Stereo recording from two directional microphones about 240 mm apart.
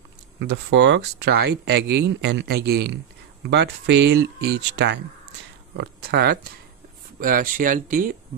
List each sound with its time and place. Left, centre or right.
0.4 s speech: right